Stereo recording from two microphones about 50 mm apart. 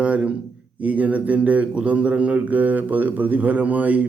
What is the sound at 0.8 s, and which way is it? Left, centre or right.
Speech, right.